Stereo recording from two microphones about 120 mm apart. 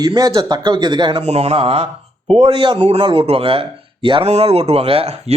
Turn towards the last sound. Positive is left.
turn(degrees=-55)  # may be behind; listen again after turning